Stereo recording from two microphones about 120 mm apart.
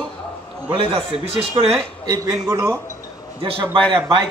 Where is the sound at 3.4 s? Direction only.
45° right (ahead or behind).